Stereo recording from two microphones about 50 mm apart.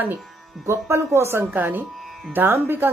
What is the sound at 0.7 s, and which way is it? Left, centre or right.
Speech, right.